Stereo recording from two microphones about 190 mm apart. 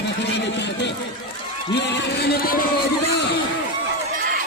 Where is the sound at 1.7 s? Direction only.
65° left (ahead or behind).